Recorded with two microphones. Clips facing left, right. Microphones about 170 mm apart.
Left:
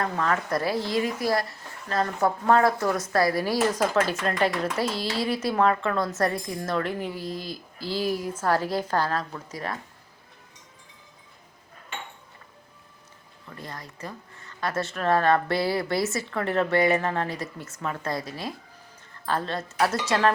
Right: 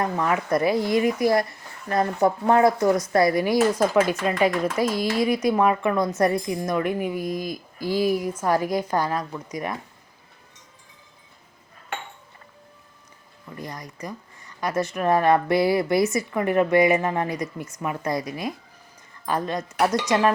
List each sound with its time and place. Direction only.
0.0 s speech: 15° right (ahead or behind)
13.6 s speech: 15° right (ahead or behind)